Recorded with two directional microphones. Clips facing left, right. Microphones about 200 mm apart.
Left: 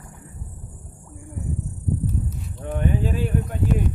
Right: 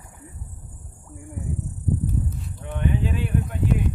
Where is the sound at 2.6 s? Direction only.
35° left (ahead or behind).